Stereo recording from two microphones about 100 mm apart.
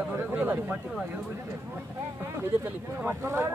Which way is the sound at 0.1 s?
20° right (ahead or behind).